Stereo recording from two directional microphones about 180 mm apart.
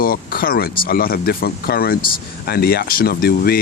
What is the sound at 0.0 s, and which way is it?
Speech, 55° left (ahead or behind).